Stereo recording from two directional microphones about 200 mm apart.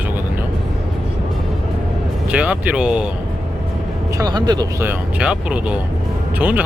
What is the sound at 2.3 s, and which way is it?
Speech, 5° right (ahead or behind).